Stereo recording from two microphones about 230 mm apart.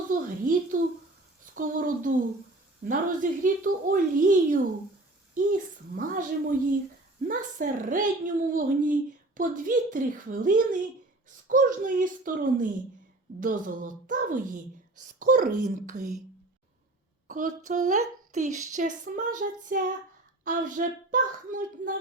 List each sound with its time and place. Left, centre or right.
0.1 s a sound: right
1.5 s a woman's voice: right
17.2 s a woman's voice: right